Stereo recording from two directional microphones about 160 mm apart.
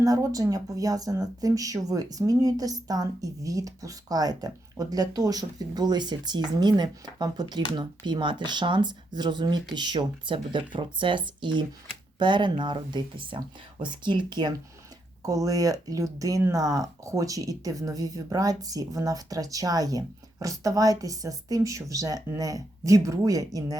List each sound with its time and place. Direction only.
0.0 s speech: 20° right (ahead or behind)